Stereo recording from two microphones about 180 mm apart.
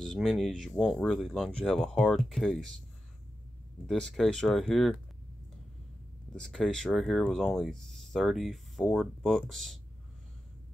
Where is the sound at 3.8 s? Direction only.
5° left (ahead or behind).